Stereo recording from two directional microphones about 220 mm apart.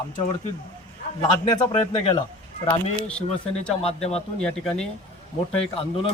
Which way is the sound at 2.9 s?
5° left (ahead or behind).